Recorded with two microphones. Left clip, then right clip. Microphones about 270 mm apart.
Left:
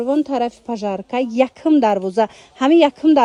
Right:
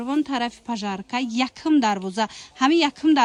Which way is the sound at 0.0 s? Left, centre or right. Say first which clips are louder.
Left 6 dB; centre.